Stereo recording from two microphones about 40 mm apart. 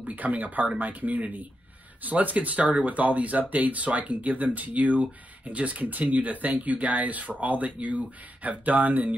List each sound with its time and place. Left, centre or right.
0.0 s speech: right